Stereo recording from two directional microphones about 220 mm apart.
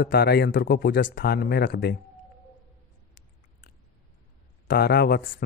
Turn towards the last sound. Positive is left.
turn(degrees=45)  # may be behind; listen again after turning